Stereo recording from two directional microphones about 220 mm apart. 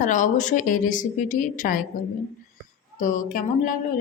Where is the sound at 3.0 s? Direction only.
40° left (ahead or behind).